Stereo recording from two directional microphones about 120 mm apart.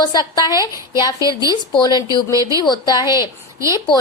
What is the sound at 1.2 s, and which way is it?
Speech, 30° right (ahead or behind).